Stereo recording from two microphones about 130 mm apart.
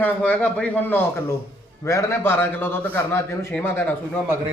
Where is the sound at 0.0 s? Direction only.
10° left (ahead or behind).